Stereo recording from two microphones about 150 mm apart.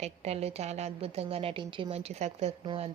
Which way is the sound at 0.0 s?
45° right (ahead or behind).